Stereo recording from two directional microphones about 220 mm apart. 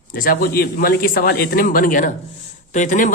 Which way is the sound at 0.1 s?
40° left (ahead or behind).